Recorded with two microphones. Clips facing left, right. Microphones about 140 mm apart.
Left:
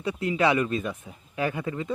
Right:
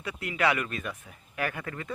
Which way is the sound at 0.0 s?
25° left (ahead or behind).